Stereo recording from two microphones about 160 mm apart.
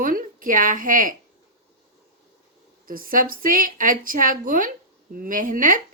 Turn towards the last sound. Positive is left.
turn(degrees=-55)  # may be behind; listen again after turning